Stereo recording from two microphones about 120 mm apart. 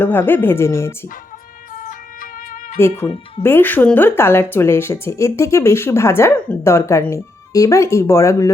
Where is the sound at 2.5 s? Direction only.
90° left.